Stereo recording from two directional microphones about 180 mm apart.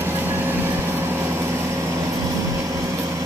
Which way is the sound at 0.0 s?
10° right (ahead or behind).